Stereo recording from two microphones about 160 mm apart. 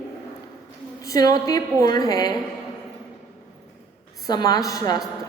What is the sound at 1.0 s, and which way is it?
A woman's voice, 25° left (ahead or behind).